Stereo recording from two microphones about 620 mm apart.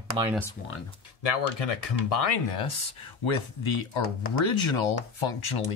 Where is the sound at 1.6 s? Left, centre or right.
Left.